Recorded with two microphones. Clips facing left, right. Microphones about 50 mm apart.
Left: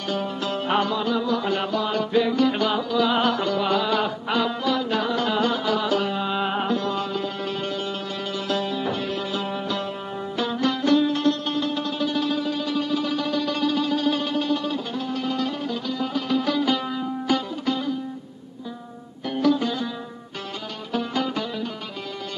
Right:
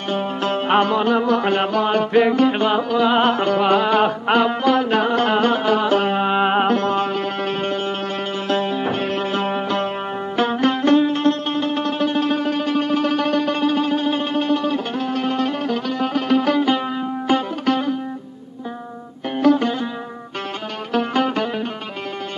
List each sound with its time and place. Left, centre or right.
0.1 s music: right
17.6 s music: right
19.3 s music: right
20.9 s music: right